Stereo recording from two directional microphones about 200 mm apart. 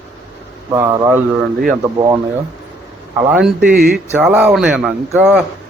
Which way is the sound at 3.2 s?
10° right (ahead or behind).